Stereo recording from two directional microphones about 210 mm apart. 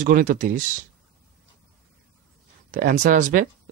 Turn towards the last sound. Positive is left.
turn(degrees=-40)  # may be behind; listen again after turning